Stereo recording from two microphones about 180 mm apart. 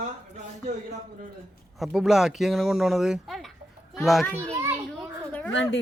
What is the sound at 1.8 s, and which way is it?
Speech, 5° right (ahead or behind).